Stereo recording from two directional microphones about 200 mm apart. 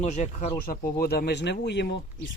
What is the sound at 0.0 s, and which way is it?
Speech, 35° left (ahead or behind).